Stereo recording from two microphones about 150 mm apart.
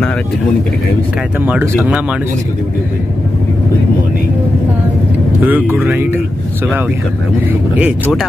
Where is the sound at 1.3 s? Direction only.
15° right (ahead or behind).